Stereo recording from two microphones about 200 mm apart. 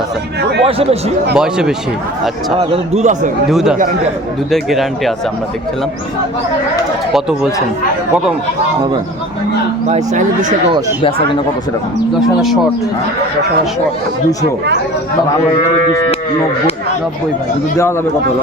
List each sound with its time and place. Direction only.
0.6 s speech: 30° right (ahead or behind)
1.4 s speech: 5° right (ahead or behind)
2.6 s a man's voice: 30° right (ahead or behind)
3.5 s speech: centre (ahead or behind)
9.9 s a man's voice: 35° right (ahead or behind)